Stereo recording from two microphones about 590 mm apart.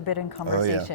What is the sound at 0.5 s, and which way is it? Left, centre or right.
Speech, right.